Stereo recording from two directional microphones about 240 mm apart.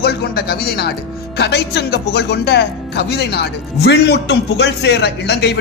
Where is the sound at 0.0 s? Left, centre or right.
Left.